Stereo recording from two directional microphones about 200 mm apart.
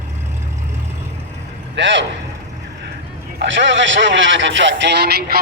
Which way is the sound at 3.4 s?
65° right (ahead or behind).